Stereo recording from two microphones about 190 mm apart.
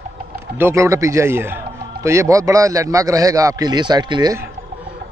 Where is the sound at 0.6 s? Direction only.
15° right (ahead or behind).